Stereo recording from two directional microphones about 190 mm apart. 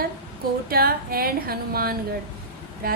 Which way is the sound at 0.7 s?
50° right (ahead or behind).